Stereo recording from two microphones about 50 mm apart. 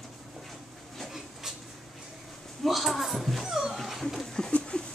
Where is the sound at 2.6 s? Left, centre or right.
Centre.